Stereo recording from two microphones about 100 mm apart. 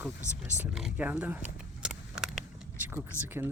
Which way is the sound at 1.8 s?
5° right (ahead or behind).